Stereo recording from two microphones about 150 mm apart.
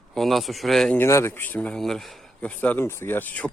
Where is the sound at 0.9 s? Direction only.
15° left (ahead or behind).